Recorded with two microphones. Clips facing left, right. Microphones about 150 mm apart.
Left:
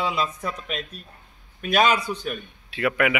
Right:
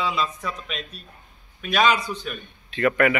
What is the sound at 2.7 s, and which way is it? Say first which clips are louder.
Speech: right 3 dB; 5° left (ahead or behind).